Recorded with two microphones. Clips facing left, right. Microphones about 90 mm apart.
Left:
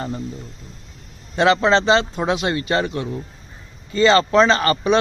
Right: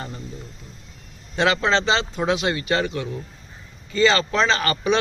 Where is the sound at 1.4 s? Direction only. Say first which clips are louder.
Left 4 dB; 25° left (ahead or behind).